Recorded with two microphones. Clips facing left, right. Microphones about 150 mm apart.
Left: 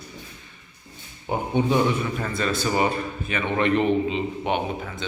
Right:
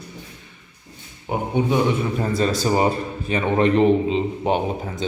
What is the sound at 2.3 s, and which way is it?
A man's voice, 35° right (ahead or behind).